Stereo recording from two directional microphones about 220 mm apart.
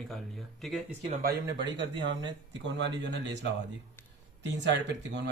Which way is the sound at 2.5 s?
55° right (ahead or behind).